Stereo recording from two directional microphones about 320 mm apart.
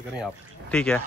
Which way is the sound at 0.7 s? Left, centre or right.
Centre.